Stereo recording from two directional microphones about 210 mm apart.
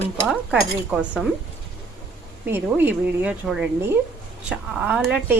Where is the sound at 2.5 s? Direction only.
10° right (ahead or behind).